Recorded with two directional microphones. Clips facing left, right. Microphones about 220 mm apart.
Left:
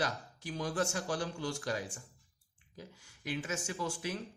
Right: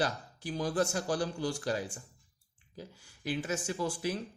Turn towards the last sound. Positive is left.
turn(degrees=-35)  # may be behind; listen again after turning